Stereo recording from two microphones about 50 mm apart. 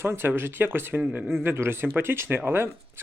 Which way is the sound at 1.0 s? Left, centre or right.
Right.